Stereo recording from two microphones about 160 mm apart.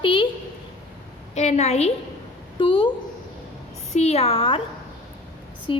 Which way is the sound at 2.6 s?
35° left (ahead or behind).